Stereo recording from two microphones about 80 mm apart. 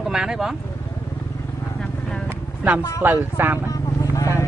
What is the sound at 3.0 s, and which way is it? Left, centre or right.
Speech, right.